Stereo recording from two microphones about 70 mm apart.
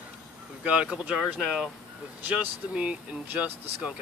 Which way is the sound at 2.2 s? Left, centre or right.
Centre.